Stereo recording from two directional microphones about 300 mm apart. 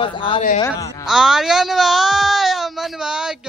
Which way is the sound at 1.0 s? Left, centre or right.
Centre.